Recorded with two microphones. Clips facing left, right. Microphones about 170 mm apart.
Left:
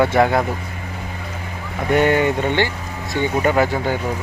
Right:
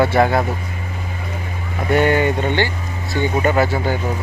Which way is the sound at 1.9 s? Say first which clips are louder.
Even; 20° left (ahead or behind).